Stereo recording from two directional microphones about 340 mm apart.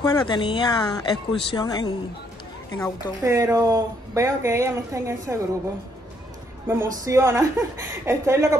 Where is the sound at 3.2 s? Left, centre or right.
Centre.